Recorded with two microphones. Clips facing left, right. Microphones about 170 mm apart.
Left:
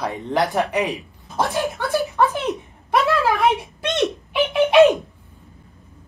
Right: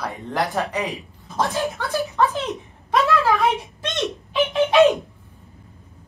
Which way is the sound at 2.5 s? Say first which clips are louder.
Left 1 dB; 15° left (ahead or behind).